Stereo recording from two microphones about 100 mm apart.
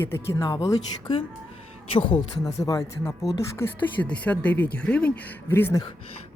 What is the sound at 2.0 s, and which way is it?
Speech, 10° left (ahead or behind).